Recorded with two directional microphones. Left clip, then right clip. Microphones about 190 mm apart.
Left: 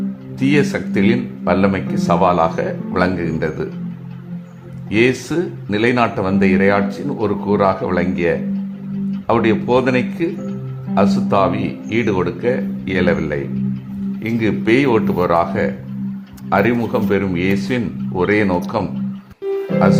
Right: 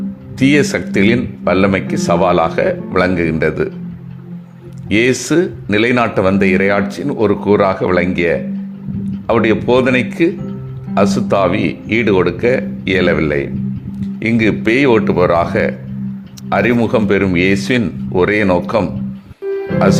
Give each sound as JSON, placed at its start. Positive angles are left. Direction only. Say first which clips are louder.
{"t": 0.3, "sound": "speech", "louder": "right 4 dB", "side_deg": -15}
{"t": 4.9, "sound": "speech", "louder": "right 3 dB", "side_deg": -15}